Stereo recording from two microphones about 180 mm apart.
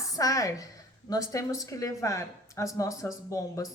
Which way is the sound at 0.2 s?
20° left (ahead or behind).